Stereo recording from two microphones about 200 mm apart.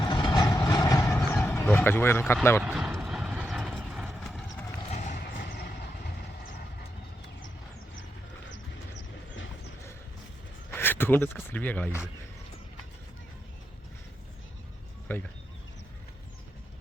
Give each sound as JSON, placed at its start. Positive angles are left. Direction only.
{"t": 0.0, "sound": "train", "side_deg": 20}
{"t": 1.4, "sound": "speech", "side_deg": 10}
{"t": 2.6, "sound": "clip-clop", "side_deg": -5}
{"t": 4.9, "sound": "horse", "side_deg": 35}
{"t": 5.1, "sound": "vehicle", "side_deg": 50}
{"t": 8.4, "sound": "horse", "side_deg": 60}
{"t": 10.7, "sound": "speech", "side_deg": 10}
{"t": 15.0, "sound": "speech", "side_deg": 10}